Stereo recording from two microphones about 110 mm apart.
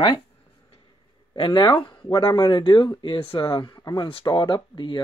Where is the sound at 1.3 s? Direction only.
50° left (ahead or behind).